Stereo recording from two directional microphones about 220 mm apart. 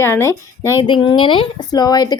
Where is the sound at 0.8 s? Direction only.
20° left (ahead or behind).